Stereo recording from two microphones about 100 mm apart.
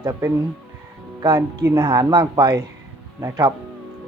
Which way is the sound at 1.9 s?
45° right (ahead or behind).